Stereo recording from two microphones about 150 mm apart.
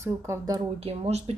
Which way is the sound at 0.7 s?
40° right (ahead or behind).